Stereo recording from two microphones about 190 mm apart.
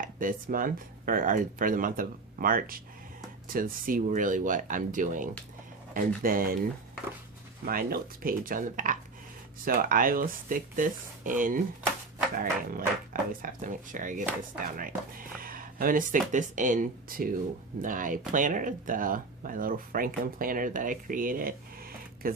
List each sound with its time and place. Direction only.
0.0 s speech: 45° right (ahead or behind)
7.6 s speech: 50° right (ahead or behind)